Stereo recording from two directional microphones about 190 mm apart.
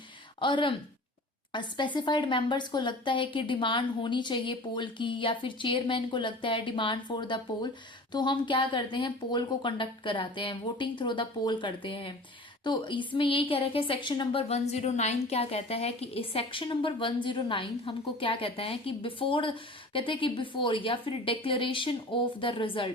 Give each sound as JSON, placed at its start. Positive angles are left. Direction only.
{"t": 0.3, "sound": "a woman's voice", "side_deg": 25}